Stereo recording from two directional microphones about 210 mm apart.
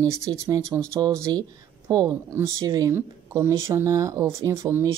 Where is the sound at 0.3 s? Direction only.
20° right (ahead or behind).